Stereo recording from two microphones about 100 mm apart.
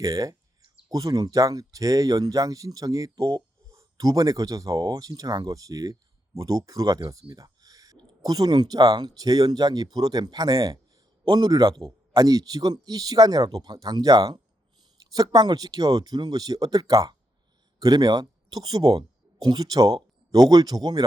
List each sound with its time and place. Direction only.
0.0 s speech: 35° right (ahead or behind)
7.3 s a sound: 35° right (ahead or behind)
7.9 s speech: 40° right (ahead or behind)